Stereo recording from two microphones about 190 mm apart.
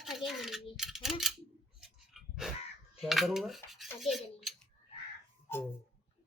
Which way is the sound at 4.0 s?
Centre (ahead or behind).